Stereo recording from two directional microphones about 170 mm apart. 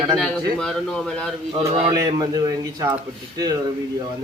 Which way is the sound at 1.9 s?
25° right (ahead or behind).